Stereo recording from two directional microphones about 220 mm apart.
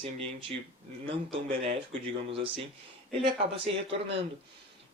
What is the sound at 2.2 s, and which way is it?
Speech, 25° right (ahead or behind).